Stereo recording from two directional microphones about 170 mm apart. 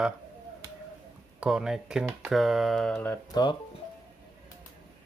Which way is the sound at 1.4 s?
5° right (ahead or behind).